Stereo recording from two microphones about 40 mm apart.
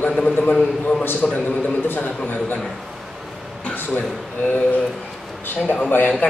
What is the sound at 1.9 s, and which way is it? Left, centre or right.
Speech, left.